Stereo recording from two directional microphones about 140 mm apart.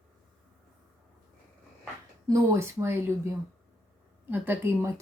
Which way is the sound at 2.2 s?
20° right (ahead or behind).